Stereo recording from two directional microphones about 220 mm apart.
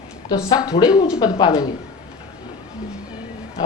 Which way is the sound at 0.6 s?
20° left (ahead or behind).